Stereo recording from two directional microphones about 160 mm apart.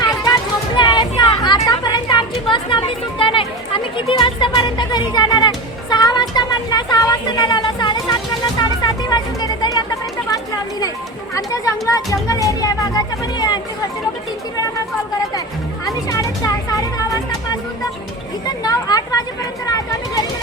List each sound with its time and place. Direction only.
0.0 s a sound: 25° left (ahead or behind)
8.8 s music: 25° left (ahead or behind)
11.3 s speech: 20° left (ahead or behind)
15.9 s speech: 20° left (ahead or behind)
18.4 s a sound: 25° left (ahead or behind)
19.6 s speech: 25° left (ahead or behind)